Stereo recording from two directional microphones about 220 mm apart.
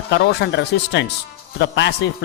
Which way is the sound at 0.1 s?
50° left (ahead or behind).